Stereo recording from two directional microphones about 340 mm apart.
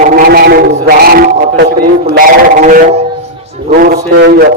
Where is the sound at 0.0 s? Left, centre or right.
Right.